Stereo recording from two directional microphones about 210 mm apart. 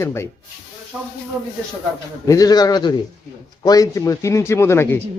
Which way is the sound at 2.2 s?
15° left (ahead or behind).